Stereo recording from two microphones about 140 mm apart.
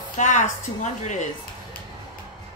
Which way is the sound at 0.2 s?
55° left (ahead or behind).